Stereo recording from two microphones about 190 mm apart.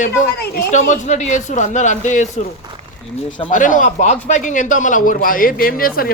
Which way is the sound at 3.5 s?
40° left (ahead or behind).